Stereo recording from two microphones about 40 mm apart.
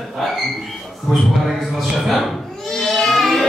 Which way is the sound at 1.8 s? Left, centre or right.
Centre.